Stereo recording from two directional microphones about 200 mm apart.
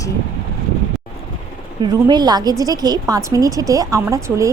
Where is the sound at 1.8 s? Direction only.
20° right (ahead or behind).